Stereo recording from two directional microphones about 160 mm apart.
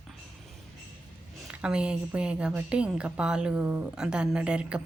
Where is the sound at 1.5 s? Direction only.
5° right (ahead or behind).